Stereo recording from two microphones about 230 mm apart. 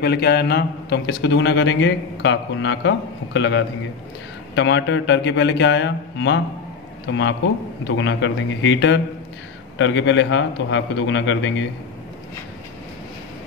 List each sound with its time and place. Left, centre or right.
0.0 s a man's voice: left